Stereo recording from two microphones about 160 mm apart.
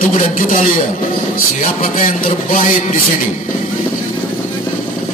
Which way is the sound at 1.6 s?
55° left (ahead or behind).